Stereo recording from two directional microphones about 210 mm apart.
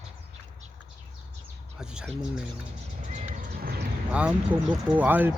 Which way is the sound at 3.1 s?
40° right (ahead or behind).